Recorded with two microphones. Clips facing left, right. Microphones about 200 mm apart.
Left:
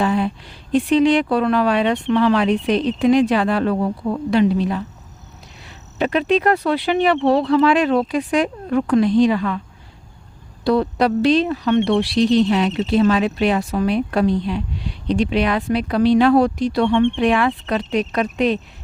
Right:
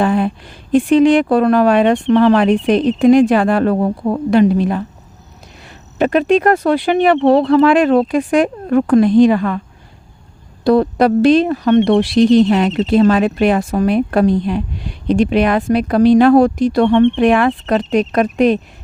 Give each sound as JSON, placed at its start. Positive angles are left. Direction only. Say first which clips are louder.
{"t": 0.0, "sound": "speech", "louder": "right 4 dB", "side_deg": -50}
{"t": 10.6, "sound": "speech", "louder": "right 5 dB", "side_deg": -45}